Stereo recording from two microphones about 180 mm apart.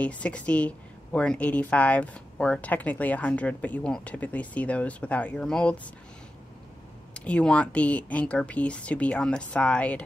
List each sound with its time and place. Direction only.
0.0 s speech: 5° left (ahead or behind)
7.2 s speech: 5° left (ahead or behind)